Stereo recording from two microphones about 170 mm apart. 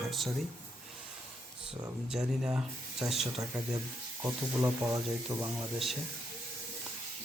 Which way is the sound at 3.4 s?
20° right (ahead or behind).